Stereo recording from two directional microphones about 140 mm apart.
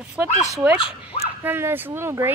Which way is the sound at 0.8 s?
40° left (ahead or behind).